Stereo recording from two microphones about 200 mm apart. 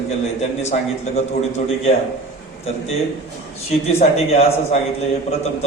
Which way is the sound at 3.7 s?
30° left (ahead or behind).